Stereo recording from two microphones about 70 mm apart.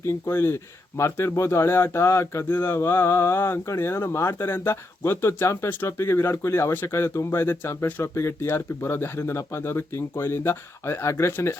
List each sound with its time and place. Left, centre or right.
0.0 s speech: left
7.4 s speech: left